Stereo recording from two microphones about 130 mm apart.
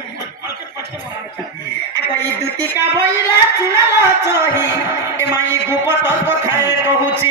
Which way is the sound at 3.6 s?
20° right (ahead or behind).